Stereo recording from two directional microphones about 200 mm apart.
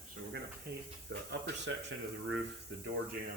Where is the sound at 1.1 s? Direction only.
60° right (ahead or behind).